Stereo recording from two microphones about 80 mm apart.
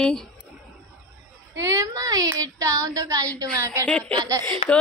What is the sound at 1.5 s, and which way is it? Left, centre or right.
Speech, right.